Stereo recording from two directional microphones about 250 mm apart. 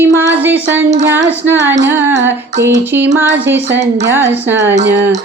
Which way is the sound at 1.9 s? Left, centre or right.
Centre.